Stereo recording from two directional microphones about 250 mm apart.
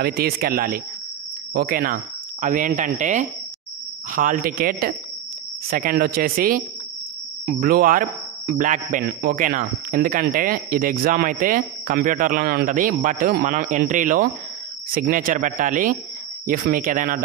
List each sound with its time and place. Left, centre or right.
0.0 s a man's voice: right